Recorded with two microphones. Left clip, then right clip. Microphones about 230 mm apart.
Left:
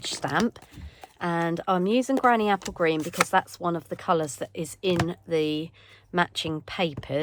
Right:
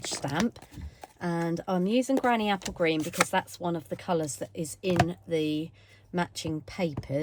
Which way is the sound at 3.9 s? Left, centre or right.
Centre.